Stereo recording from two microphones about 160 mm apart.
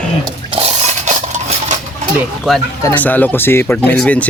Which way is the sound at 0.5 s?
45° right (ahead or behind).